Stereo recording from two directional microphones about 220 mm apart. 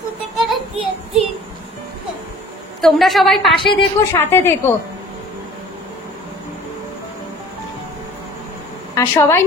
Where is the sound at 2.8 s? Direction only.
Centre (ahead or behind).